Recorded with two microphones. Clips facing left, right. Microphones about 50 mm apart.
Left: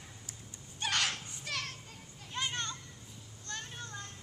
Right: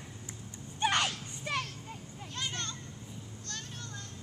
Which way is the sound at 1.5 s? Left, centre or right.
Right.